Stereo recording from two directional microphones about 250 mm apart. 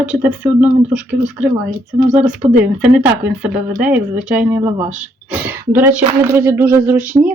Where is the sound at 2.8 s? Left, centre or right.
Centre.